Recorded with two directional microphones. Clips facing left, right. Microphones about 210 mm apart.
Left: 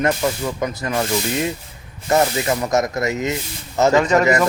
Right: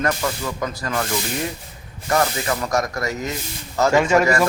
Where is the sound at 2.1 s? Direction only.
20° left (ahead or behind).